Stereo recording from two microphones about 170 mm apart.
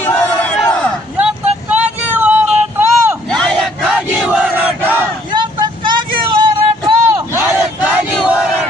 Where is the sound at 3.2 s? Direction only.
5° left (ahead or behind).